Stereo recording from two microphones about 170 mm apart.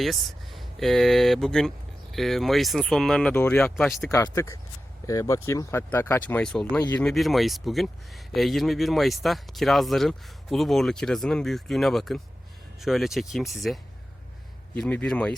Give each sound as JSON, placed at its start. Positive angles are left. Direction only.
{"t": 0.0, "sound": "speech", "side_deg": 0}
{"t": 4.1, "sound": "speech", "side_deg": 15}
{"t": 14.8, "sound": "speech", "side_deg": 5}